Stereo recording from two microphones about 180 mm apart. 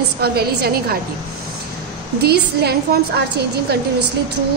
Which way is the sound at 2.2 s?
65° right (ahead or behind).